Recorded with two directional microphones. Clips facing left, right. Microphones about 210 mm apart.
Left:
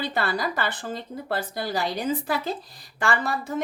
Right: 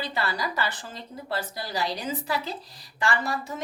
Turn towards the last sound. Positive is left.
turn(degrees=55)  # may be behind; listen again after turning